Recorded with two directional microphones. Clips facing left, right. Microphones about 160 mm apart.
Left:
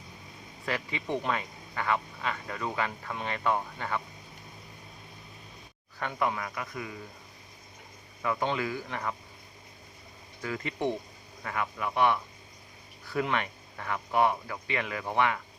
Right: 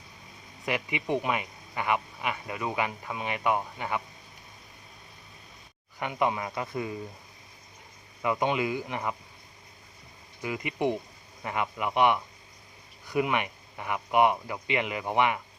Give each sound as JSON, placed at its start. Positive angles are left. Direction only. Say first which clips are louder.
{"t": 0.6, "sound": "speech", "louder": "right 3 dB", "side_deg": -15}
{"t": 6.0, "sound": "speech", "louder": "right 3 dB", "side_deg": -15}
{"t": 8.2, "sound": "speech", "louder": "right 3 dB", "side_deg": -20}
{"t": 10.4, "sound": "speech", "louder": "right 2 dB", "side_deg": -15}